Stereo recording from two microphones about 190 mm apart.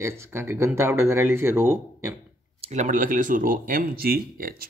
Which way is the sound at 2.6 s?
40° right (ahead or behind).